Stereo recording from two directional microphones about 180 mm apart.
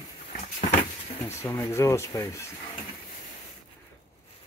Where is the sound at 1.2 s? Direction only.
15° left (ahead or behind).